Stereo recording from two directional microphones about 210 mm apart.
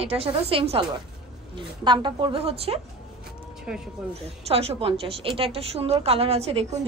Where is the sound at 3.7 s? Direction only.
5° right (ahead or behind).